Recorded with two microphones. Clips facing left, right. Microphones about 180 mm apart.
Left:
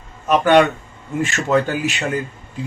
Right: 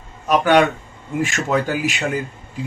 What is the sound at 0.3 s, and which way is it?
Speech, 5° right (ahead or behind).